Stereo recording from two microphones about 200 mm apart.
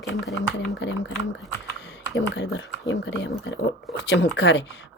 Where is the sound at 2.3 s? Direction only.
65° left (ahead or behind).